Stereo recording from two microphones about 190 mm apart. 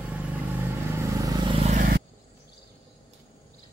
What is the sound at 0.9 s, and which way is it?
Vehicle, 15° right (ahead or behind).